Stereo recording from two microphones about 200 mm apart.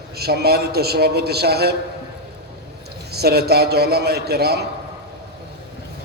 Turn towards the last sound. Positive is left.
turn(degrees=-55)  # may be behind; listen again after turning